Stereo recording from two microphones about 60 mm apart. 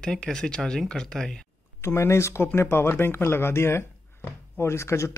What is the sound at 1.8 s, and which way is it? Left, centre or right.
Speech, left.